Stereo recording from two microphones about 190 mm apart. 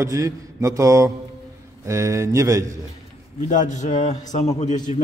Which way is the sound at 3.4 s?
40° left (ahead or behind).